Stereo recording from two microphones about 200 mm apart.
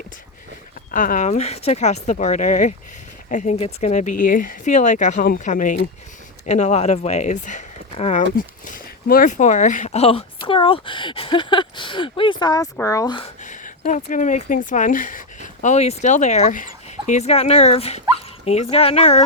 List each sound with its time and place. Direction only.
0.9 s speech: 40° left (ahead or behind); by 13.3 s 25° left (ahead or behind)
13.4 s speech: 40° left (ahead or behind)